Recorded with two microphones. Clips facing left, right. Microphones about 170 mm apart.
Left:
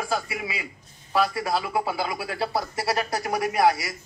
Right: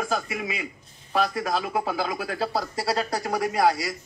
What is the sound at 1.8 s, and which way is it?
Speech, 25° left (ahead or behind).